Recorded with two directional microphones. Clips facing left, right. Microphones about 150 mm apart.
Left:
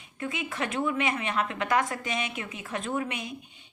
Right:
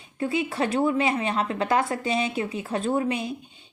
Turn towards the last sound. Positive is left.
turn(degrees=-30)  # may be behind; listen again after turning